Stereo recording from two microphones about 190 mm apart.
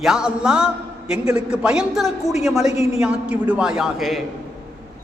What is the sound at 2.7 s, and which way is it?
Speech, 35° left (ahead or behind).